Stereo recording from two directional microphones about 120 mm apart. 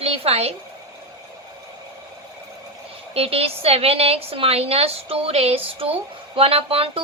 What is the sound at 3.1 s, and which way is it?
A woman's voice, 55° right (ahead or behind).